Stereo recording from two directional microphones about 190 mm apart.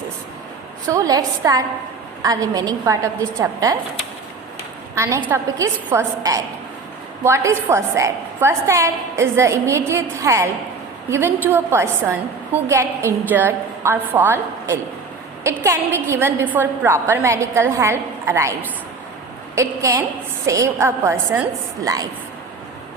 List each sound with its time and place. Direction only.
0.9 s a woman's voice: 20° right (ahead or behind)
4.9 s a woman's voice: 15° right (ahead or behind)
19.5 s a woman's voice: 15° right (ahead or behind)